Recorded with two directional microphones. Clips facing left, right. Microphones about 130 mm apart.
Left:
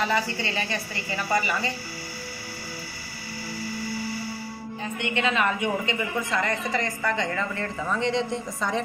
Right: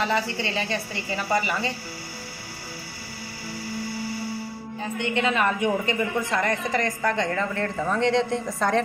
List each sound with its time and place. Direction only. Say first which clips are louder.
0.1 s a woman's voice: right 1 dB; 25° right (ahead or behind)
5.0 s a woman's voice: right 1 dB; 40° right (ahead or behind); by 8.8 s 60° right (ahead or behind)